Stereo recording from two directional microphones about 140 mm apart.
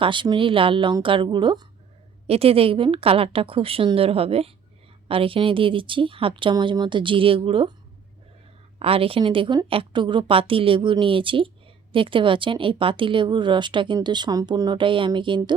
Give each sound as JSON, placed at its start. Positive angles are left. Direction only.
{"t": 0.0, "sound": "a woman's voice", "side_deg": -35}
{"t": 2.2, "sound": "a woman's voice", "side_deg": -45}
{"t": 8.8, "sound": "a woman's voice", "side_deg": -45}